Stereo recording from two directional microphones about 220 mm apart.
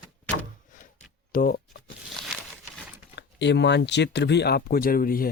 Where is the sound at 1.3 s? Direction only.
40° left (ahead or behind).